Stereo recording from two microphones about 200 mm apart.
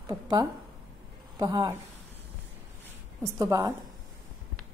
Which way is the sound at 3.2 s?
15° right (ahead or behind).